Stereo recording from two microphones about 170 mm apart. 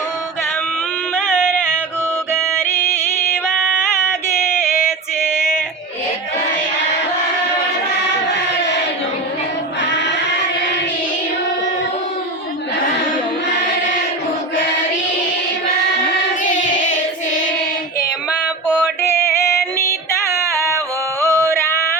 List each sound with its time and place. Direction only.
2.6 s music: 15° left (ahead or behind)
4.8 s female singing: 5° right (ahead or behind)
16.4 s child singing: 50° left (ahead or behind)
21.2 s a sound: 15° left (ahead or behind)